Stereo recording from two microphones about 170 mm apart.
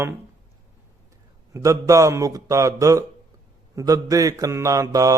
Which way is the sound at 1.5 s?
20° right (ahead or behind).